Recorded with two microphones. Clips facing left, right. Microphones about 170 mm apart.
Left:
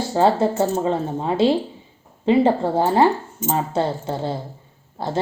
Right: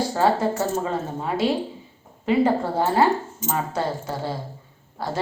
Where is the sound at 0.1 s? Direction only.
25° left (ahead or behind).